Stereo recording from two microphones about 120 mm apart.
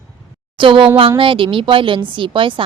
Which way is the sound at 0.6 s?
45° right (ahead or behind).